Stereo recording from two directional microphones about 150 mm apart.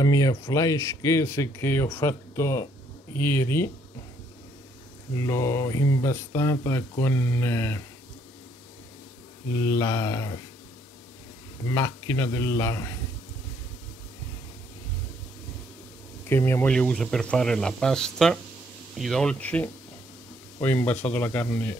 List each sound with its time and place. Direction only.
0.0 s speech: 25° left (ahead or behind)
5.1 s speech: 20° left (ahead or behind)
9.7 s speech: 20° left (ahead or behind)
11.7 s a man's voice: 15° left (ahead or behind)
16.3 s a man's voice: 15° left (ahead or behind)
16.7 s a man's voice: 5° left (ahead or behind)